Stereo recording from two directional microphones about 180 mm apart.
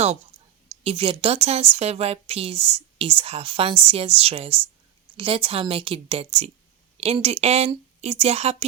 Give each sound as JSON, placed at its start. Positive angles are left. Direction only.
{"t": 0.9, "sound": "speech", "side_deg": -30}